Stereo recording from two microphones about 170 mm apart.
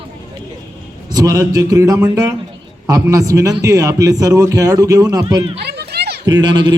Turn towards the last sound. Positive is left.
turn(degrees=-25)  # may be behind; listen again after turning